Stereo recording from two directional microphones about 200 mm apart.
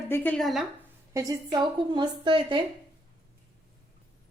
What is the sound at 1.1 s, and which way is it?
A woman's voice, 20° right (ahead or behind).